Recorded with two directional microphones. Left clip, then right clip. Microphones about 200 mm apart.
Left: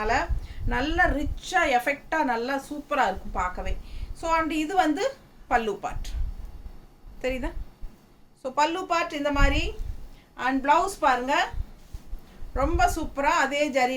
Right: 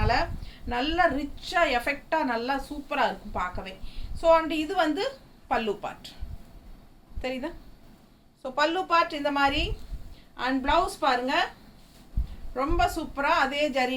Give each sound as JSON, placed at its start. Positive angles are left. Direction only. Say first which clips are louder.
{"t": 0.0, "sound": "a woman's voice", "louder": "left 1 dB", "side_deg": 15}
{"t": 7.2, "sound": "a woman's voice", "louder": "left 3 dB", "side_deg": 20}
{"t": 12.5, "sound": "a woman's voice", "louder": "left 2 dB", "side_deg": 15}